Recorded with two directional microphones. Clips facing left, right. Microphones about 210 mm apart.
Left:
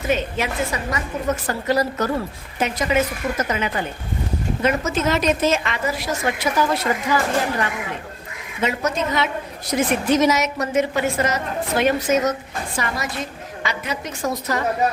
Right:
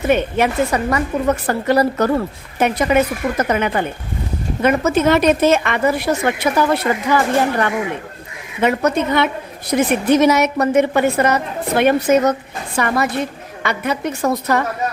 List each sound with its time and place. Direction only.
0.1 s a woman's voice: 60° right (ahead or behind)
8.6 s a woman's voice: 60° right (ahead or behind)